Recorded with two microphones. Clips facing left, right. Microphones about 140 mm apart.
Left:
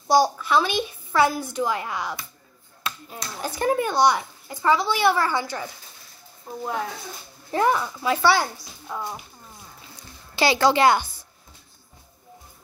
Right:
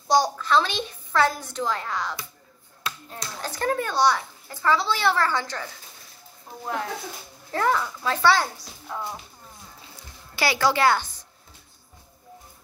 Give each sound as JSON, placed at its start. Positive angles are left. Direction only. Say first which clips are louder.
{"t": 0.1, "sound": "a child's voice", "louder": "left 2 dB", "side_deg": 10}
{"t": 7.5, "sound": "a child's voice", "louder": "left 2 dB", "side_deg": 15}
{"t": 10.3, "sound": "speech", "louder": "left 4 dB", "side_deg": 25}